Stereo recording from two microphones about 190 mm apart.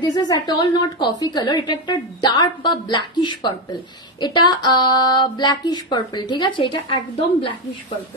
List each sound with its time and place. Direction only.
0.0 s a woman's voice: 20° left (ahead or behind)